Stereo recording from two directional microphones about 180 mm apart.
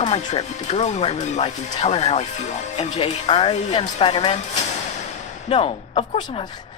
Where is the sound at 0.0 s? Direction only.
40° left (ahead or behind).